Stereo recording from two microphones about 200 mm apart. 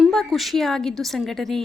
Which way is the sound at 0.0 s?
Centre (ahead or behind).